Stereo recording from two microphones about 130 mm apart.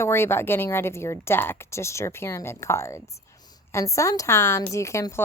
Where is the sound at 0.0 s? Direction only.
20° left (ahead or behind).